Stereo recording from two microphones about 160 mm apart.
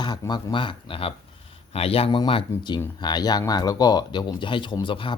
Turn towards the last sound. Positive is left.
turn(degrees=30)  # may be behind; listen again after turning